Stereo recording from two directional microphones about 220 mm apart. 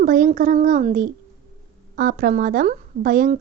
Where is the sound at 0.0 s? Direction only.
35° right (ahead or behind).